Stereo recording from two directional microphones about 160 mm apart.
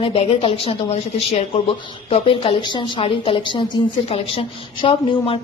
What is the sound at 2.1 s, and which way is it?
A woman's voice, 35° left (ahead or behind).